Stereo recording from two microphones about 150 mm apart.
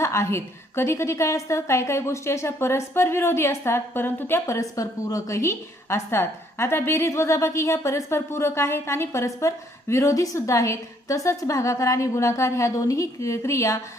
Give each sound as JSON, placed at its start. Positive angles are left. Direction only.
{"t": 0.0, "sound": "a woman's voice", "side_deg": 20}